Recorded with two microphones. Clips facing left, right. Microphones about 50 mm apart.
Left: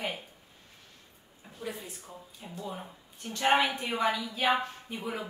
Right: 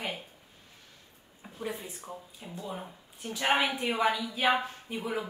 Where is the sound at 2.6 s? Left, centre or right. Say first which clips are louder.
Right 1 dB; centre.